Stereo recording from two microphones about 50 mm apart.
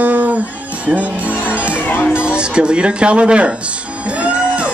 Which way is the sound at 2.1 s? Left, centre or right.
Centre.